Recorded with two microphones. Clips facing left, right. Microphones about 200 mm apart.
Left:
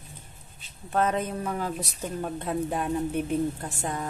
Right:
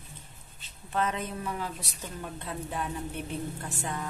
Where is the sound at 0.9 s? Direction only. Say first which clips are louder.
Left 5 dB; 45° left (ahead or behind).